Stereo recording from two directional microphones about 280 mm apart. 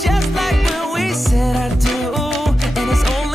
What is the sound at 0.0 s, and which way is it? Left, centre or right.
Music, centre.